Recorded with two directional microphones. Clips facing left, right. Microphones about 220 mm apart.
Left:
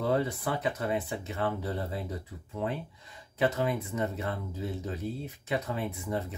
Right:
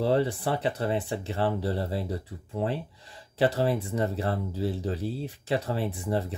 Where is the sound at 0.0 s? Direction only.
30° right (ahead or behind).